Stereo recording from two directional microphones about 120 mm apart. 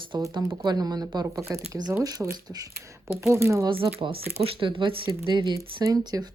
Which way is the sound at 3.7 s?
50° right (ahead or behind).